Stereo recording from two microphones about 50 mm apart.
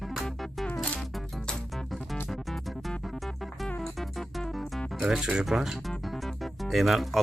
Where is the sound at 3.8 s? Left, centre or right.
Centre.